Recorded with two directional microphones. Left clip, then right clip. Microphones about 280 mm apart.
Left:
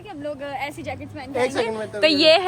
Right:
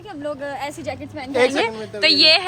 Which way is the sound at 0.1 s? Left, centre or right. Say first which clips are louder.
Right 2 dB; centre.